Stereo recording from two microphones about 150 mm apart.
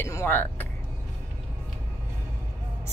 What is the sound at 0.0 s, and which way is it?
Speech, 15° left (ahead or behind).